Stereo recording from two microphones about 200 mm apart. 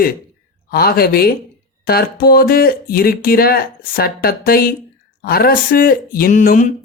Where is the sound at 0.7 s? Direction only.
50° left (ahead or behind).